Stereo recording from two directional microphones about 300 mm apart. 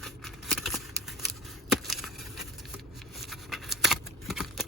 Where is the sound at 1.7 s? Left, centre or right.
Centre.